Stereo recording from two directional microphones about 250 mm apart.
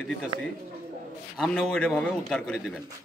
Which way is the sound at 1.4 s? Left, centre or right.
Centre.